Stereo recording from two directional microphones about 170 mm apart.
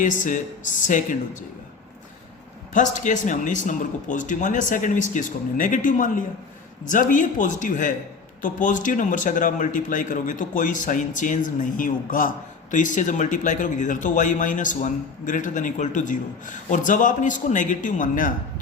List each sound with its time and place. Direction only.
0.0 s speech: 45° left (ahead or behind)
2.7 s speech: 45° left (ahead or behind)